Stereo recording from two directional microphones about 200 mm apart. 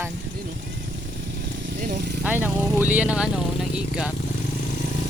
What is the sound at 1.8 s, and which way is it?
Speech, 55° right (ahead or behind).